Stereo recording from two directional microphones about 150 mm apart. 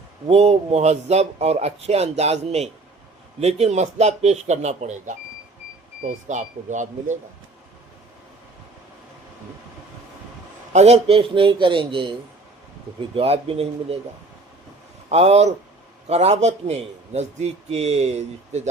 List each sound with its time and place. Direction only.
0.3 s speech: 45° right (ahead or behind)
10.7 s a man's voice: 45° right (ahead or behind)
15.1 s speech: 45° right (ahead or behind)